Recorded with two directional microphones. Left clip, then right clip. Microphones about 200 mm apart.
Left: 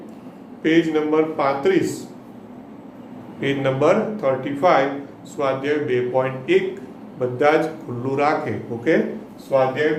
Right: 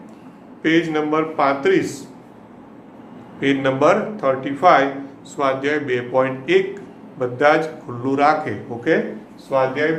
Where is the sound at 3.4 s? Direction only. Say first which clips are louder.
Right 2 dB; 10° right (ahead or behind).